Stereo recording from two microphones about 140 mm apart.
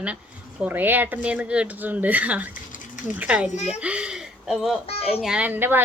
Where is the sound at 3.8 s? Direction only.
5° right (ahead or behind).